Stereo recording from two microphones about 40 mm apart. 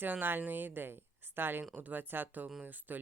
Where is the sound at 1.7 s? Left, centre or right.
Right.